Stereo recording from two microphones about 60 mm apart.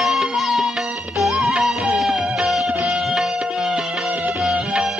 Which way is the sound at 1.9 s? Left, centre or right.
Centre.